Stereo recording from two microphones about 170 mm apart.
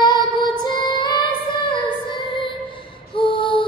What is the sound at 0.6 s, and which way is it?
Music, 25° left (ahead or behind).